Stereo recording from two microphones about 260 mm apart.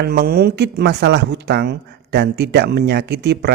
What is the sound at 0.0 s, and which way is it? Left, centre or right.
Speech, right.